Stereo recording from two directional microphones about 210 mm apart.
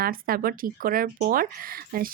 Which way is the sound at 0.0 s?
45° right (ahead or behind).